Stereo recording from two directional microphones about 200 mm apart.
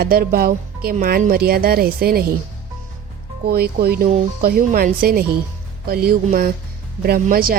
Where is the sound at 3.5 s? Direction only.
50° right (ahead or behind).